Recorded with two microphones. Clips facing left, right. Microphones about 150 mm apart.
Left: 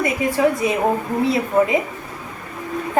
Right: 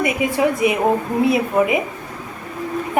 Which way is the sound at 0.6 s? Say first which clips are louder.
Right 2 dB; 15° right (ahead or behind).